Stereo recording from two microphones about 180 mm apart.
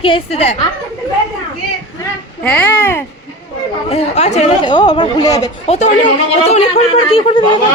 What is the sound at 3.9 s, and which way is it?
Speech, 35° left (ahead or behind).